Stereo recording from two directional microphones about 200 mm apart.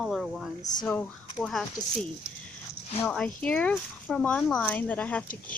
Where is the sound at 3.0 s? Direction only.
5° left (ahead or behind).